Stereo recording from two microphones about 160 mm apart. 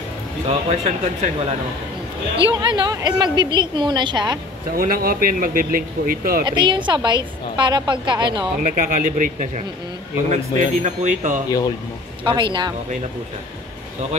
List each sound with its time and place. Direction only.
0.5 s speech: 45° right (ahead or behind)
2.3 s a woman's voice: 30° right (ahead or behind)
4.7 s speech: 65° right (ahead or behind)
6.4 s a woman's voice: 30° right (ahead or behind)
8.6 s speech: 60° right (ahead or behind)
12.3 s a woman's voice: 30° right (ahead or behind)